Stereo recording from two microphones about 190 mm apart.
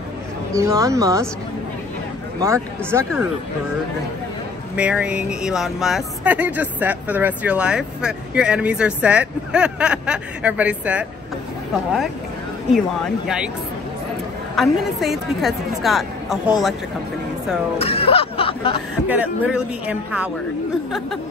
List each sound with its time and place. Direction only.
0.6 s a man's voice: 15° right (ahead or behind)
2.4 s a man's voice: 15° right (ahead or behind)
4.7 s speech: 5° right (ahead or behind)
12.7 s speech: centre (ahead or behind)
14.5 s speech: centre (ahead or behind)
17.7 s speech: 30° left (ahead or behind)
19.0 s a man's voice: 10° right (ahead or behind)